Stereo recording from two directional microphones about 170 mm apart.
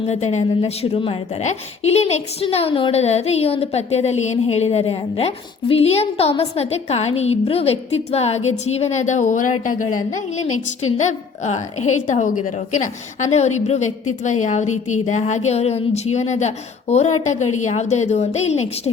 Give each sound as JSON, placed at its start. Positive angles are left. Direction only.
{"t": 0.1, "sound": "a woman's voice", "side_deg": 40}